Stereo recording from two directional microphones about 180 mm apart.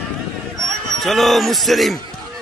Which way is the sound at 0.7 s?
Centre (ahead or behind).